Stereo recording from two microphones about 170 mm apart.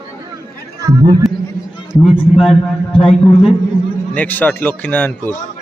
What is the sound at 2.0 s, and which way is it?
A man's voice, centre (ahead or behind).